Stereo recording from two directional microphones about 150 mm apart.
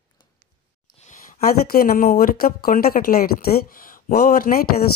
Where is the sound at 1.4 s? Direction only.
80° left.